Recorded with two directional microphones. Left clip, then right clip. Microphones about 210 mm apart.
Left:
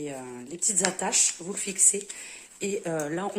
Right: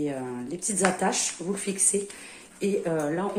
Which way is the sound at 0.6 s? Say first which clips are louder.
Right 3 dB; 25° left (ahead or behind).